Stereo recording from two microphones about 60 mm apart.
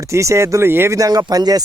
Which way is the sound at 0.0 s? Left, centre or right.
Right.